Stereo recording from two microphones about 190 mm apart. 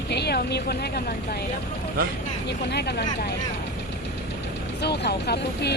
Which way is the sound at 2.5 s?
60° left (ahead or behind).